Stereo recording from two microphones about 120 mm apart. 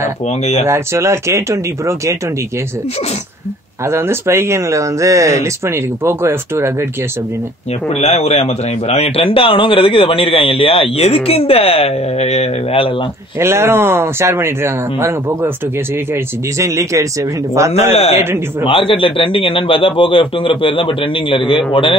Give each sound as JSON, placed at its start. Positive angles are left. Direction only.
{"t": 0.7, "sound": "speech", "side_deg": -20}
{"t": 3.8, "sound": "speech", "side_deg": -20}
{"t": 7.9, "sound": "a man's voice", "side_deg": 60}
{"t": 13.4, "sound": "speech", "side_deg": -20}
{"t": 16.5, "sound": "speech", "side_deg": -25}
{"t": 17.9, "sound": "speech", "side_deg": 60}
{"t": 18.2, "sound": "speech", "side_deg": -20}
{"t": 18.7, "sound": "a man's voice", "side_deg": 50}